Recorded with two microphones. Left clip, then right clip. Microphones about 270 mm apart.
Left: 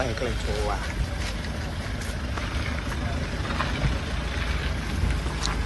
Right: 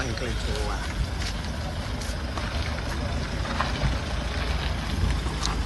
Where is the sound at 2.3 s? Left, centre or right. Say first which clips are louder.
Even; right.